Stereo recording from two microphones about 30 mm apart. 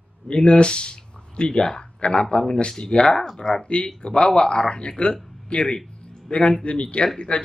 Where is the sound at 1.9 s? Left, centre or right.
Left.